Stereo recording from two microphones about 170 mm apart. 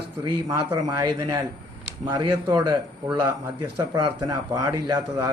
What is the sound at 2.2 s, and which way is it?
Speech, 25° right (ahead or behind).